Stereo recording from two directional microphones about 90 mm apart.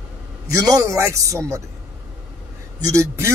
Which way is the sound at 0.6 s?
40° right (ahead or behind).